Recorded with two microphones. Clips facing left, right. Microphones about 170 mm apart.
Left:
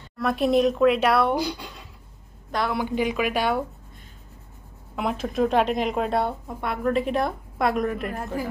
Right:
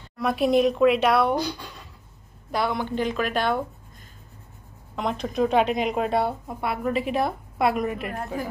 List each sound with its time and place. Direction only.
0.2 s a woman's voice: centre (ahead or behind)
2.5 s a woman's voice: centre (ahead or behind)
2.8 s speech: 10° left (ahead or behind)
4.9 s a woman's voice: 5° left (ahead or behind)